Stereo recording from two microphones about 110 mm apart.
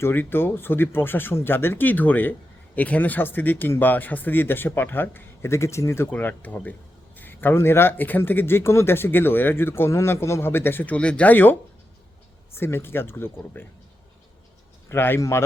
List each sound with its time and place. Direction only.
0.0 s speech: 20° left (ahead or behind)
12.5 s speech: 20° left (ahead or behind)
14.8 s speech: 20° left (ahead or behind)